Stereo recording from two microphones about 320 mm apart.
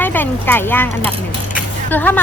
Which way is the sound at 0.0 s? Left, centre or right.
Centre.